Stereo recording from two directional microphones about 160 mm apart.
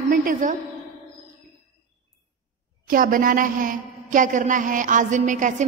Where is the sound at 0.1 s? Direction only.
60° right (ahead or behind).